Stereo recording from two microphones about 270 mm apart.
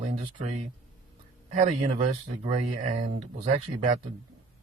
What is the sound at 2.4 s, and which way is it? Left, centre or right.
Speech, right.